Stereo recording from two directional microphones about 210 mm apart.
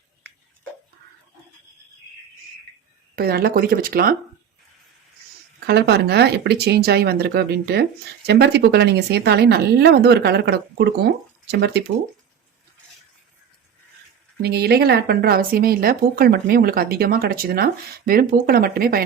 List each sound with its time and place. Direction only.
3.2 s speech: 45° right (ahead or behind)
5.6 s speech: 50° right (ahead or behind)
14.4 s speech: 50° right (ahead or behind)